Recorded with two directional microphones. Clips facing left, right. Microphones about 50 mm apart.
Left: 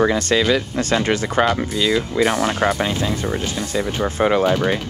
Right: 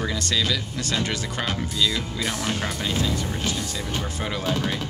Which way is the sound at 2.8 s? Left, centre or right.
Left.